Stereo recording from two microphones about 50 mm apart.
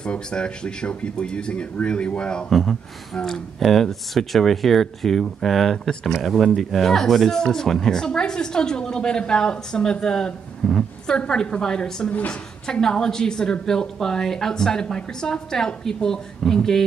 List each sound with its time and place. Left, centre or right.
0.0 s speech: centre
2.5 s speech: centre
12.1 s a woman's voice: left
12.8 s speech: centre